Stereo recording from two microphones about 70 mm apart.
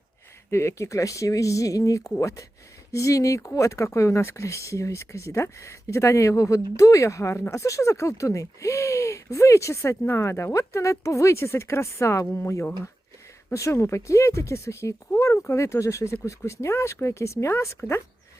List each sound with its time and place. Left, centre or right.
0.5 s speech: left